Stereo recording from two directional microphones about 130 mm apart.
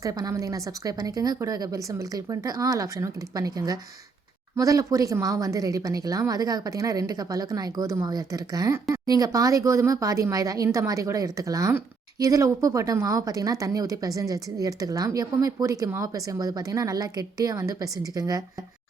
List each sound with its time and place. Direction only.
0.0 s speech: 25° right (ahead or behind)